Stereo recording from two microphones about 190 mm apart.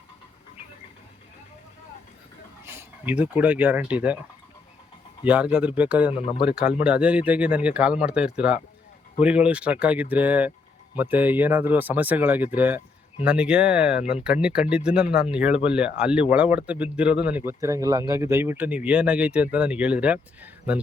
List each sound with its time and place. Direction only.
2.6 s speech: 10° right (ahead or behind)
5.2 s speech: 5° right (ahead or behind)
6.1 s speech: 30° left (ahead or behind)
6.6 s speech: 5° right (ahead or behind)